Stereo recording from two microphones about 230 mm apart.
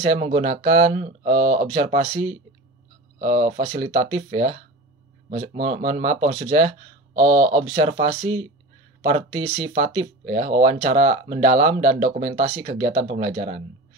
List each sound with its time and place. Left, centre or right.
0.0 s speech: right
5.3 s speech: right